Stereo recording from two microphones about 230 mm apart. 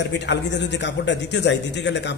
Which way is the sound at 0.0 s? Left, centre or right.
Left.